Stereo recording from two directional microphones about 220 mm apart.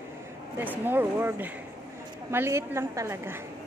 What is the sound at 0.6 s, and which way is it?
A woman's voice, 10° right (ahead or behind).